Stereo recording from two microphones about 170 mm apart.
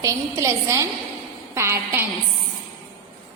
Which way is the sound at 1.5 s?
15° right (ahead or behind).